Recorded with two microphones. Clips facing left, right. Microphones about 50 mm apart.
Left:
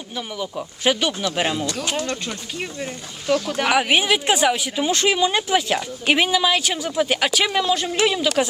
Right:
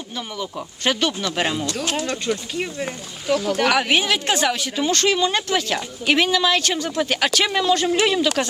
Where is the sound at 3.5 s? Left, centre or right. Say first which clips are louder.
Even; centre.